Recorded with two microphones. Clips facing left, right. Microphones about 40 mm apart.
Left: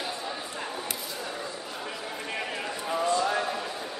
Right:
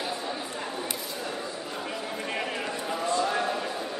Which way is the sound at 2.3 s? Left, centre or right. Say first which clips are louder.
Right 1 dB; centre.